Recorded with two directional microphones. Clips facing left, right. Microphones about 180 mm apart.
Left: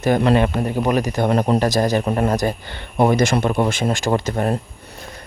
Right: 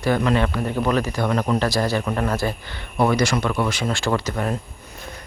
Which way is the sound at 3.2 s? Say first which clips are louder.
Left 3 dB; 50° left (ahead or behind).